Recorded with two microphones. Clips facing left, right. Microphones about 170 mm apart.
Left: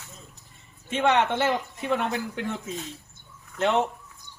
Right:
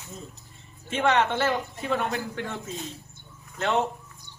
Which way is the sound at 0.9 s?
15° left (ahead or behind).